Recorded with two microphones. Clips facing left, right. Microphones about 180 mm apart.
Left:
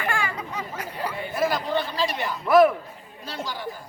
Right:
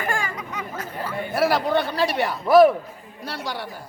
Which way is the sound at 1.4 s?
70° right (ahead or behind).